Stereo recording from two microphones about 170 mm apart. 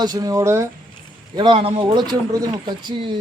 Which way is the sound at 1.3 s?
30° right (ahead or behind).